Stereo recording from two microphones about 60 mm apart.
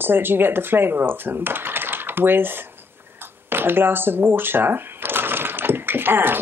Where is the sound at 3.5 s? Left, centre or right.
Right.